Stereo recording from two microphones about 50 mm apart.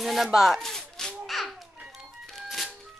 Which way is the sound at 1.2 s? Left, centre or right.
Centre.